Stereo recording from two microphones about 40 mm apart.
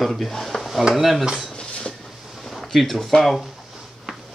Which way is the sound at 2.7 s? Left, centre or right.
Centre.